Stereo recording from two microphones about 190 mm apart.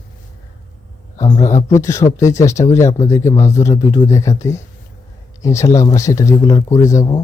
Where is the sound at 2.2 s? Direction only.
15° left (ahead or behind).